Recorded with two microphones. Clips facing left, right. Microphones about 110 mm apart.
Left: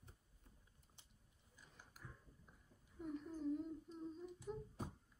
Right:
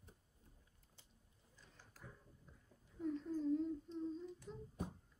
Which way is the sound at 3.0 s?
10° left (ahead or behind).